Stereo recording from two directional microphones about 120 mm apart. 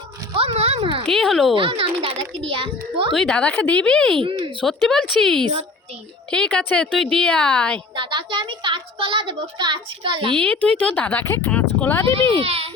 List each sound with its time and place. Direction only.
0.3 s a sound: 55° right (ahead or behind)
1.0 s speech: 5° left (ahead or behind)
1.5 s a child's voice: 50° right (ahead or behind)
3.1 s speech: 5° left (ahead or behind)
4.2 s a child's voice: 45° right (ahead or behind)
4.6 s speech: 5° left (ahead or behind)
7.9 s a child's voice: 45° right (ahead or behind)
10.3 s speech: 10° left (ahead or behind)
12.3 s a child's voice: 55° right (ahead or behind)